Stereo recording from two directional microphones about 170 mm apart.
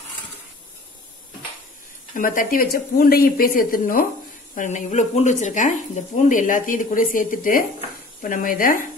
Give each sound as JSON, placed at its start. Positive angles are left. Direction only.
{"t": 2.1, "sound": "speech", "side_deg": 55}
{"t": 4.6, "sound": "speech", "side_deg": 45}